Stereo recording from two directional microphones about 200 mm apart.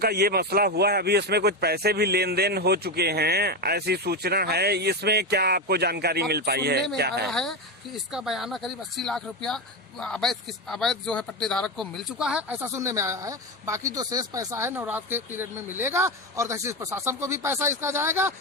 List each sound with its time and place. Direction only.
0.0 s speech: 50° right (ahead or behind)
7.3 s speech: centre (ahead or behind)